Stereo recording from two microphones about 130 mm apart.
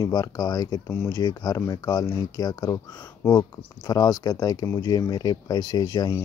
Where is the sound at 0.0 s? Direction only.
30° left (ahead or behind).